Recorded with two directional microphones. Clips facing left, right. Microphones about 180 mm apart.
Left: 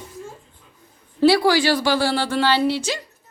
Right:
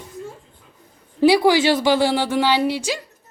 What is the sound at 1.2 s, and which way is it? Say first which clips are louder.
Speech: right 1 dB; 15° right (ahead or behind).